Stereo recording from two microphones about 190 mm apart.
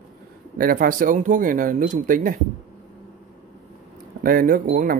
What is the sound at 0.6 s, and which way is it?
Speech, 50° right (ahead or behind).